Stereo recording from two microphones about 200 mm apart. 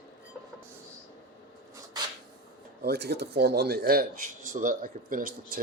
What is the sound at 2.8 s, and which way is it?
Speech, 55° right (ahead or behind).